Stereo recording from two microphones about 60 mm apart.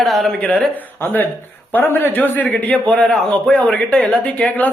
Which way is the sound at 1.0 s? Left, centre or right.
Left.